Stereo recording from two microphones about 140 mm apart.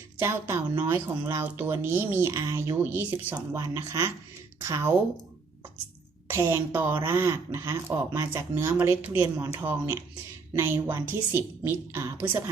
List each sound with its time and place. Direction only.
0.2 s speech: 20° right (ahead or behind)
6.2 s speech: 20° right (ahead or behind)